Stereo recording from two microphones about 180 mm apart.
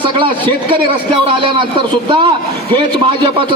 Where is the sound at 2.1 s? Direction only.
25° right (ahead or behind).